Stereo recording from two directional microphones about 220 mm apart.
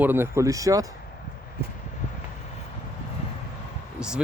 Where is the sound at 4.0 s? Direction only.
5° right (ahead or behind).